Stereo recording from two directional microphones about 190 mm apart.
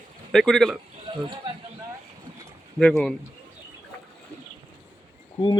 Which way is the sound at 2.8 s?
5° left (ahead or behind).